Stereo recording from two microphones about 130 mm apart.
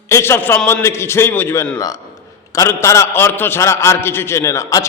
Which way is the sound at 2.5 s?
25° left (ahead or behind).